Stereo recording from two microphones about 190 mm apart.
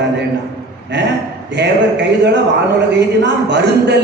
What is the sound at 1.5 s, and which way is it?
Speech, 65° right (ahead or behind).